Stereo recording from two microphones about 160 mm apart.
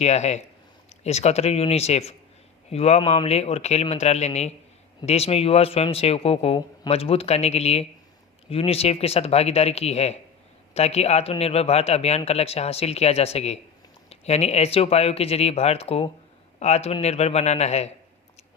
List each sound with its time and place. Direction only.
0.0 s a man's voice: 45° left (ahead or behind)